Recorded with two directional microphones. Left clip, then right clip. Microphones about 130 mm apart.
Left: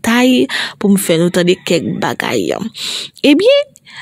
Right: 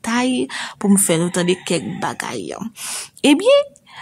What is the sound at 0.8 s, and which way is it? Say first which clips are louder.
A woman's voice: left 4 dB; 30° left (ahead or behind).